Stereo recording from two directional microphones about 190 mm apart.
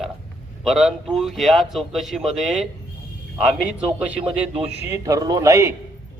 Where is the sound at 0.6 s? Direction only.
Centre (ahead or behind).